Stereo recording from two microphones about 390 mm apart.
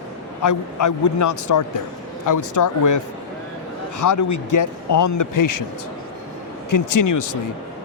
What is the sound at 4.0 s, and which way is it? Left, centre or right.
Speech, left.